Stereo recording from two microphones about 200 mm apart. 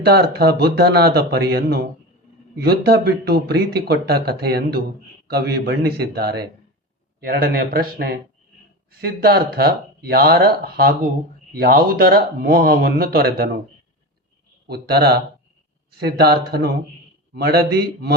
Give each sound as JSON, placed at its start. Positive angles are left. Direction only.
{"t": 0.0, "sound": "speech", "side_deg": -55}
{"t": 14.7, "sound": "speech", "side_deg": -55}